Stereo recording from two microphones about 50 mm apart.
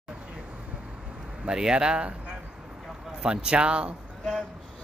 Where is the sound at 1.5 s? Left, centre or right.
Centre.